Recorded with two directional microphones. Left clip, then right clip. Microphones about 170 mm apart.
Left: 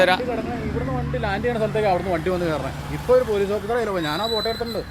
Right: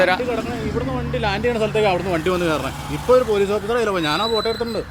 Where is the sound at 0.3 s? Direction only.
60° right (ahead or behind).